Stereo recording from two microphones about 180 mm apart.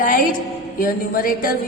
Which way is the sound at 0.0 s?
50° left (ahead or behind).